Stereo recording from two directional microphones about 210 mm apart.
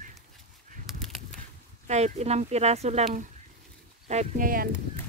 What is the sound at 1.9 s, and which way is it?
Speech, 30° right (ahead or behind).